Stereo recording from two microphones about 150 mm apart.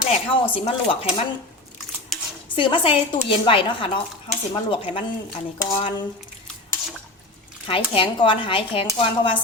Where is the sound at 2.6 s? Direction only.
35° left (ahead or behind).